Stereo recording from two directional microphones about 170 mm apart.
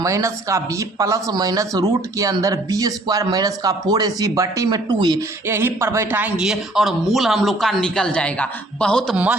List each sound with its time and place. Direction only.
0.0 s speech: 20° right (ahead or behind); by 9.1 s 5° left (ahead or behind)
9.1 s speech: 10° right (ahead or behind)